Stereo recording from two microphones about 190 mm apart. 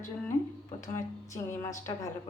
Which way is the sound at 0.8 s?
15° left (ahead or behind).